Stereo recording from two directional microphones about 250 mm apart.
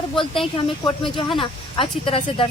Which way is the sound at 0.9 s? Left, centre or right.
Centre.